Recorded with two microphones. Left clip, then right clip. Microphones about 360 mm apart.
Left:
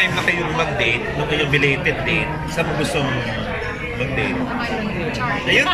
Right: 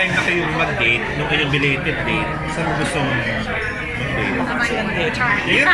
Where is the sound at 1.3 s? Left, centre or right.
Left.